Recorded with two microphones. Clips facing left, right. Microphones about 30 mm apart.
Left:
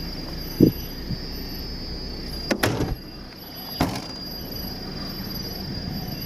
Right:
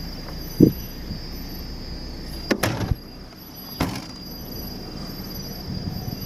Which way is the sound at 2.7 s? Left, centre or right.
Centre.